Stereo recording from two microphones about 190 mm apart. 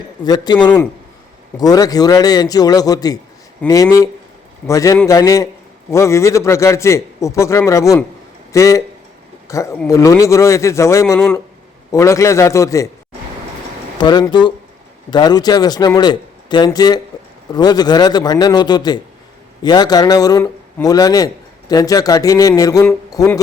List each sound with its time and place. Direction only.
0.3 s a man's voice: 20° left (ahead or behind)
14.0 s speech: 20° left (ahead or behind)